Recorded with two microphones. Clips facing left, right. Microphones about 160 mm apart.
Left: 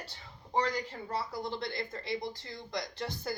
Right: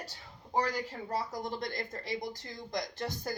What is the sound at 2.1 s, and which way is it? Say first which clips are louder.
Speech: even; 15° right (ahead or behind).